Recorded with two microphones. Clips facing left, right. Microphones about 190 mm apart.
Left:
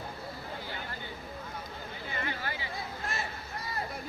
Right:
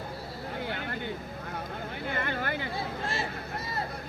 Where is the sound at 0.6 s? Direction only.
60° right (ahead or behind).